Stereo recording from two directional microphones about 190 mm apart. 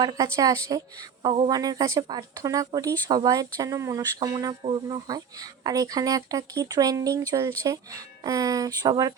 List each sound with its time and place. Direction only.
0.0 s speech: 20° right (ahead or behind)
1.2 s speech: 30° right (ahead or behind)
1.5 s speech: 20° right (ahead or behind)